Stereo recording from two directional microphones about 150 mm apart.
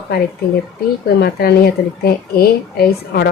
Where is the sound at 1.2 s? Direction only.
90° left.